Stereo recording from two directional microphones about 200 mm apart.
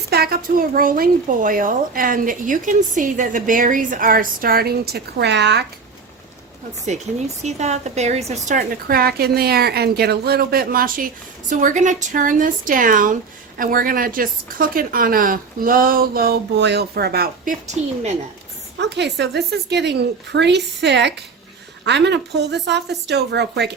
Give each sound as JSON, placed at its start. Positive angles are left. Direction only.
{"t": 0.1, "sound": "a woman's voice", "side_deg": -50}
{"t": 7.4, "sound": "a woman's voice", "side_deg": -35}
{"t": 18.8, "sound": "a woman's voice", "side_deg": -60}